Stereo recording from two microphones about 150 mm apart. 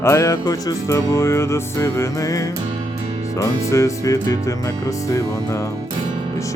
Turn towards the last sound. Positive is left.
turn(degrees=20)  # may be behind; listen again after turning